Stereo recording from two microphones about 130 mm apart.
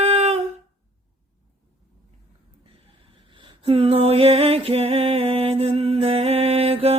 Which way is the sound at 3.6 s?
45° right (ahead or behind).